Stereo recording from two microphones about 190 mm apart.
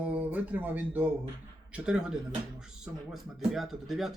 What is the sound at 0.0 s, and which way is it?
Speech, 10° right (ahead or behind).